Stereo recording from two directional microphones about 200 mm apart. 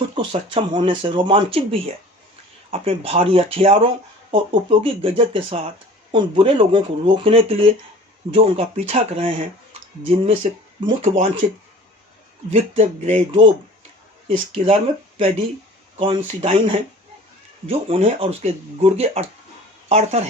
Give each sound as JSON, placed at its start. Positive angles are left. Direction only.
{"t": 0.1, "sound": "speech", "side_deg": -25}
{"t": 10.8, "sound": "speech", "side_deg": -25}
{"t": 12.5, "sound": "speech", "side_deg": -35}
{"t": 16.0, "sound": "speech", "side_deg": -30}